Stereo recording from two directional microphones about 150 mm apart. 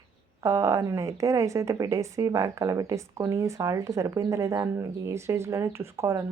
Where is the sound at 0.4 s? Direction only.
20° right (ahead or behind).